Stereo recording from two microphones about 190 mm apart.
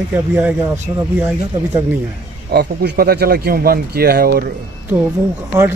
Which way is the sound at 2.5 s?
60° right (ahead or behind).